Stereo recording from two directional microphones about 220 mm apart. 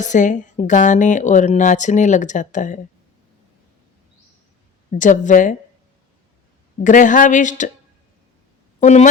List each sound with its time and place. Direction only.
0.0 s a woman's voice: 35° left (ahead or behind)
4.9 s a woman's voice: 35° left (ahead or behind)
6.8 s a woman's voice: 35° left (ahead or behind)
8.8 s speech: 30° left (ahead or behind)